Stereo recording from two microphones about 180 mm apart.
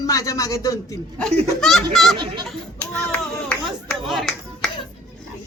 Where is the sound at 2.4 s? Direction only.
5° left (ahead or behind).